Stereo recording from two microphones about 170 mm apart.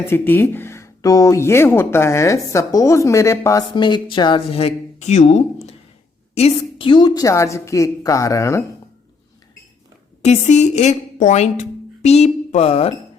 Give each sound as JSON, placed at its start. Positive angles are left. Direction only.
{"t": 0.1, "sound": "speech", "side_deg": 15}
{"t": 3.8, "sound": "a woman's voice", "side_deg": 25}
{"t": 10.2, "sound": "a woman's voice", "side_deg": 45}